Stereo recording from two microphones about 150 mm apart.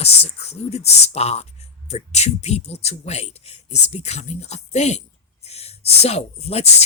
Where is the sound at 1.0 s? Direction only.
45° left (ahead or behind).